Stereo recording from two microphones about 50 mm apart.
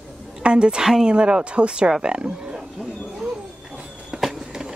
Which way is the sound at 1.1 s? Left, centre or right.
Centre.